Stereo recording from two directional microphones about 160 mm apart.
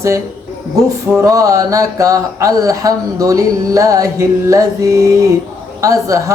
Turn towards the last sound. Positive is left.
turn(degrees=-20)  # may be behind; listen again after turning